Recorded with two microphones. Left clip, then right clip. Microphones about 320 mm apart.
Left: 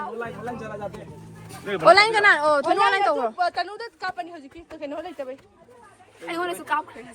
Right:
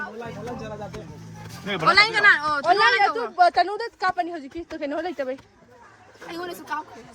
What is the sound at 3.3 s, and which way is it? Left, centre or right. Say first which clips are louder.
Speech: right 7 dB; right.